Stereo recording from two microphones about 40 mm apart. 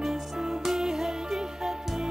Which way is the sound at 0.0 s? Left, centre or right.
Centre.